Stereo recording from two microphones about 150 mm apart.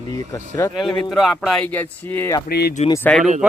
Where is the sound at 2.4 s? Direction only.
90° left.